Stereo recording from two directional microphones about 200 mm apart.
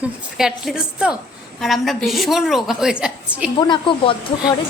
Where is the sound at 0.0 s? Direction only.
Centre (ahead or behind).